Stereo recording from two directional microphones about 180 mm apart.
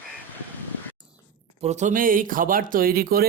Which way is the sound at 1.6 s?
40° right (ahead or behind).